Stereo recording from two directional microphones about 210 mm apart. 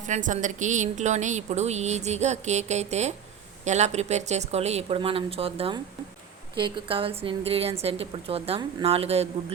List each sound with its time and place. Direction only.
0.1 s a woman's voice: 35° right (ahead or behind)